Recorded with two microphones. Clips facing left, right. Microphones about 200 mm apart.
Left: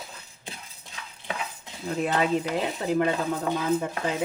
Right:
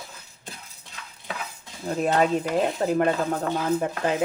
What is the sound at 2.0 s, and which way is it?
Speech, 45° right (ahead or behind).